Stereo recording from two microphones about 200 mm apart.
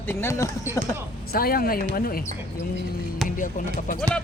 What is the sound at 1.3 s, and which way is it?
Speech, 50° left (ahead or behind).